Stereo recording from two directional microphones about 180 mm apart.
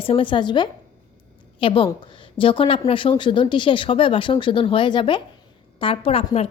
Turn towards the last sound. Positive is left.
turn(degrees=30)  # may be behind; listen again after turning